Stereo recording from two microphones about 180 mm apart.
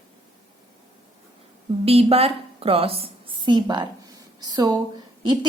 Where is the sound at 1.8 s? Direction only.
35° right (ahead or behind).